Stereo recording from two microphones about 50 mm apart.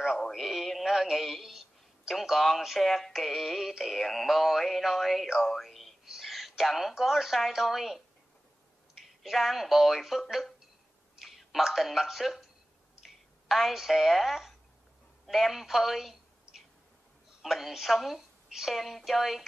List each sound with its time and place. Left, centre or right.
0.3 s a woman's voice: centre
17.4 s a woman's voice: centre